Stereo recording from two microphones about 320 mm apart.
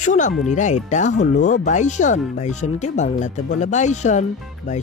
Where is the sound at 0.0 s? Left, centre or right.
Left.